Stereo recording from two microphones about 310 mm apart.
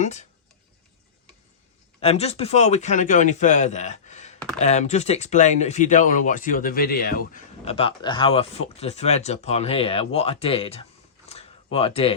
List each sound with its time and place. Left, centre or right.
0.0 s speech: left
2.0 s speech: centre
11.3 s a sound: centre